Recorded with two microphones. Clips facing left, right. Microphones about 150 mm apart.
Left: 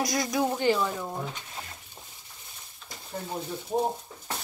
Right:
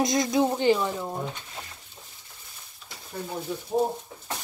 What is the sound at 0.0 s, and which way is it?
Speech, 20° right (ahead or behind).